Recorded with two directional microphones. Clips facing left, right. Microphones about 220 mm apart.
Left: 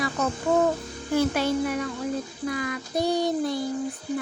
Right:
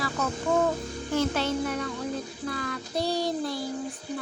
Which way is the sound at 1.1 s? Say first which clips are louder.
Left 3 dB; 10° left (ahead or behind).